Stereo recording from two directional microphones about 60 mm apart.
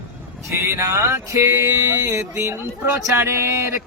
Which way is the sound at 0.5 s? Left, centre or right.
Right.